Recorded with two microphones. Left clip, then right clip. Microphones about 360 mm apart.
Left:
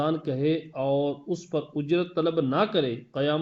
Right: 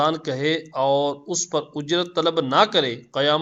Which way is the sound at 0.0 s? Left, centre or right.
Right.